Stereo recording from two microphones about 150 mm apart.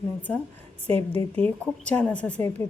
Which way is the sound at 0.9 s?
40° right (ahead or behind).